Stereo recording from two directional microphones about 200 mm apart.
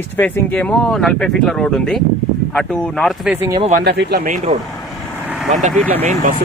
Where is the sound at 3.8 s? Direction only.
55° right (ahead or behind).